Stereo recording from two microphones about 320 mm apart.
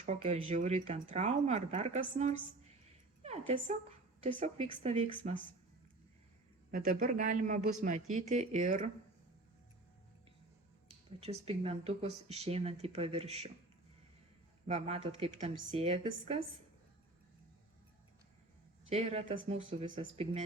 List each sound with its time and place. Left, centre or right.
0.0 s a woman's voice: right
6.7 s speech: right
10.8 s speech: centre
14.7 s speech: centre
18.9 s speech: centre